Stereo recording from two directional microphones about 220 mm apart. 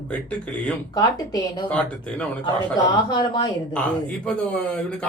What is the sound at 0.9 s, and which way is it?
Speech, 15° left (ahead or behind).